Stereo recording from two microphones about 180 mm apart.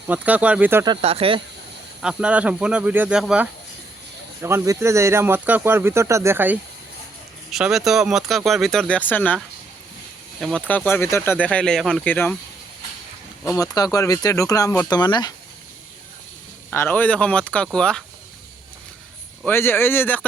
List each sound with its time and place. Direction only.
0.1 s speech: 10° right (ahead or behind)
0.9 s speech: 30° right (ahead or behind)
2.0 s speech: 5° right (ahead or behind)
4.4 s speech: 15° right (ahead or behind); by 9.4 s 10° left (ahead or behind)
10.4 s speech: 5° left (ahead or behind)
13.4 s speech: 20° left (ahead or behind)
16.7 s speech: 10° left (ahead or behind)
19.5 s speech: 10° left (ahead or behind)